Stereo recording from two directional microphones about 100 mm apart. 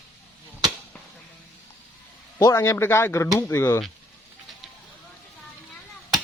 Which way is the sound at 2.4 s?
30° left (ahead or behind).